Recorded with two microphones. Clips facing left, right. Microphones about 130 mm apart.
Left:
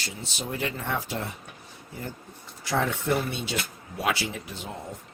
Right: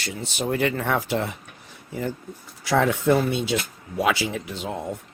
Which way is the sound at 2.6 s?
90° right.